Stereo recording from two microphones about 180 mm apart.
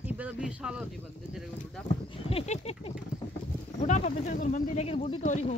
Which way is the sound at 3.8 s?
40° left (ahead or behind).